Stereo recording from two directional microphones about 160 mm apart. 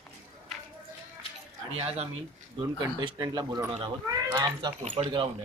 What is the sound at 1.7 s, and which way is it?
Speech, 40° right (ahead or behind).